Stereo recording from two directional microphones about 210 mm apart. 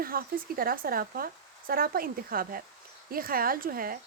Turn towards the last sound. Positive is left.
turn(degrees=-45)  # may be behind; listen again after turning